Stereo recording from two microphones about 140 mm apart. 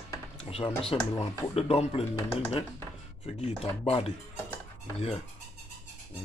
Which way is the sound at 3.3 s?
45° left (ahead or behind).